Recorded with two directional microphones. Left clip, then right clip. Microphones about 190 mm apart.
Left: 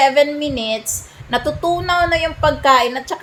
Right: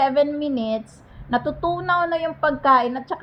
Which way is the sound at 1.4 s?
50° left (ahead or behind).